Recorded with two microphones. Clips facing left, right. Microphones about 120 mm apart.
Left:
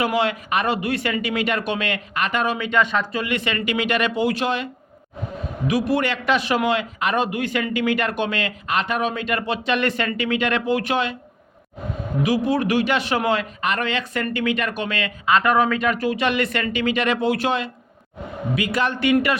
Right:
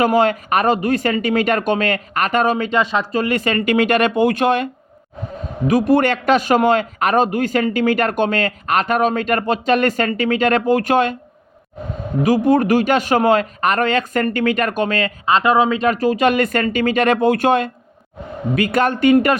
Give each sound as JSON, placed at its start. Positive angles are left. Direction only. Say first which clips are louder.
{"t": 0.0, "sound": "a man's voice", "louder": "right 6 dB", "side_deg": -45}
{"t": 12.2, "sound": "a man's voice", "louder": "right 6 dB", "side_deg": -45}
{"t": 15.3, "sound": "speech", "louder": "right 3 dB", "side_deg": -25}
{"t": 15.9, "sound": "a man's voice", "louder": "right 6 dB", "side_deg": -40}